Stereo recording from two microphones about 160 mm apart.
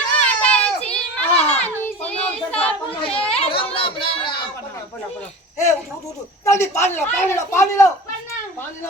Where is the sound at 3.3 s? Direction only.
35° left (ahead or behind).